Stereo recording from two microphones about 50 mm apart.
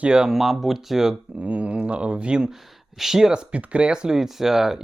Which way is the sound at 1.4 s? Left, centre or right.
Right.